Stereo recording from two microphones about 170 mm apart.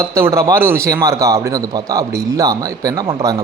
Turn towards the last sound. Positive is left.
turn(degrees=-20)  # may be behind; listen again after turning